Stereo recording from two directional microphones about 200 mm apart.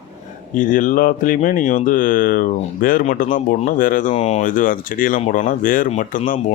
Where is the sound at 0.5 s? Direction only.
40° left (ahead or behind).